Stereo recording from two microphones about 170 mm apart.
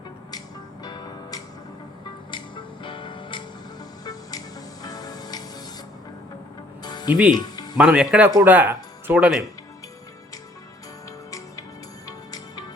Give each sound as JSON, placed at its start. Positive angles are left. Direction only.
{"t": 0.3, "sound": "music", "side_deg": 25}
{"t": 6.8, "sound": "music", "side_deg": 25}
{"t": 7.8, "sound": "speech", "side_deg": -5}
{"t": 11.3, "sound": "music", "side_deg": 20}